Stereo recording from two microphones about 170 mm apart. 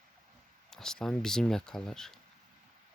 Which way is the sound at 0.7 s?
5° left (ahead or behind).